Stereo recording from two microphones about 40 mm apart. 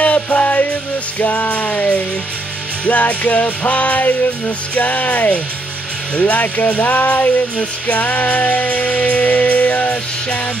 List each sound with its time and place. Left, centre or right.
0.0 s music: left